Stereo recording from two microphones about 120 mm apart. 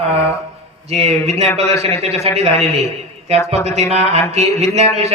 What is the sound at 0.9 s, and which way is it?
A man's voice, 60° right (ahead or behind).